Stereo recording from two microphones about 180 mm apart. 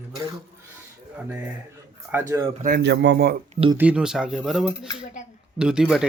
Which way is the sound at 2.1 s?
15° right (ahead or behind).